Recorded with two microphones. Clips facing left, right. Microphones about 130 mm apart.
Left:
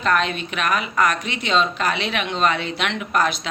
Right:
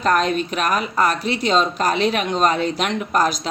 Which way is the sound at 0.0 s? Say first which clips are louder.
Right 3 dB; 40° right (ahead or behind).